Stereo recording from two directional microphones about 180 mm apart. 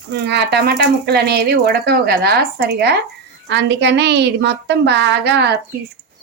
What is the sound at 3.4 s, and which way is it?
A woman's voice, 85° right.